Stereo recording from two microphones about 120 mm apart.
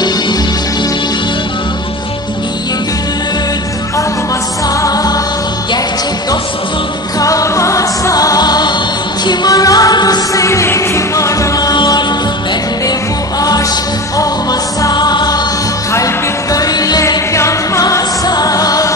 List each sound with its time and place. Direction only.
4.8 s music: 30° left (ahead or behind)
7.2 s music: 30° left (ahead or behind)
14.1 s music: 30° left (ahead or behind)
16.5 s music: 30° left (ahead or behind)